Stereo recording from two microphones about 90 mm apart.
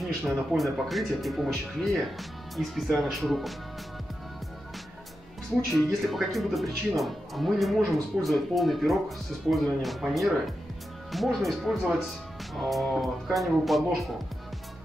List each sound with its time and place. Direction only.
0.0 s speech: 5° right (ahead or behind)
5.7 s speech: centre (ahead or behind)